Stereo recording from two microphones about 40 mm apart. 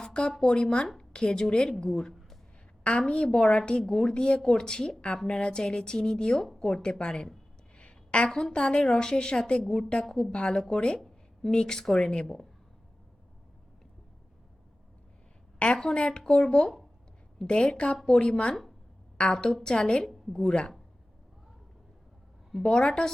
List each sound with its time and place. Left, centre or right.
0.0 s a sound: left
0.4 s a woman's voice: left
2.8 s a woman's voice: left
7.8 s a sound: left
8.5 s speech: left
12.2 s speech: centre
15.5 s speech: left
17.9 s speech: centre
18.2 s a woman's voice: left
22.6 s speech: centre